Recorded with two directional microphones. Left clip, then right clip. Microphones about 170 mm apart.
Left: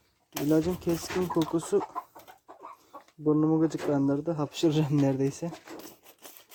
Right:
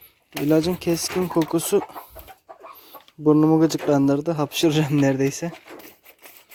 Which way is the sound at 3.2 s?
35° right (ahead or behind).